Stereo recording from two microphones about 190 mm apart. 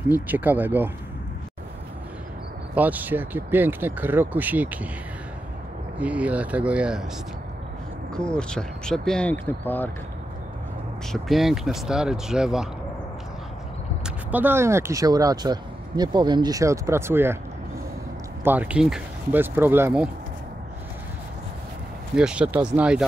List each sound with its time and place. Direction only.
0.1 s speech: 10° right (ahead or behind)
2.7 s speech: 10° right (ahead or behind)
5.9 s speech: 5° right (ahead or behind)
8.1 s speech: 5° left (ahead or behind)
11.1 s speech: centre (ahead or behind)
14.0 s speech: 10° right (ahead or behind)
18.4 s speech: 10° right (ahead or behind)
22.1 s speech: 5° right (ahead or behind)